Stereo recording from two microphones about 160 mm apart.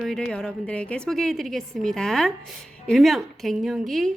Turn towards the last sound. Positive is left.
turn(degrees=0)  # may be behind; listen again after turning